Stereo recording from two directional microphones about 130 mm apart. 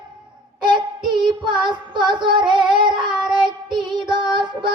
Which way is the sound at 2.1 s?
35° right (ahead or behind).